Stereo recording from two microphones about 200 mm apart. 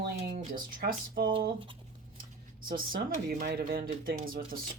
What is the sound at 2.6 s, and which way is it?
Speech, 45° right (ahead or behind).